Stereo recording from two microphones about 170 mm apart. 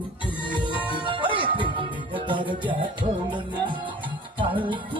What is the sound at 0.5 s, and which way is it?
Music, 30° right (ahead or behind).